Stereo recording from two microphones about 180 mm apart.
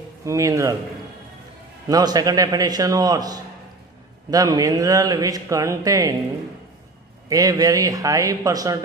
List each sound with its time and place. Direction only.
0.2 s a man's voice: 15° right (ahead or behind)
1.9 s speech: 20° right (ahead or behind)
7.2 s speech: 20° right (ahead or behind)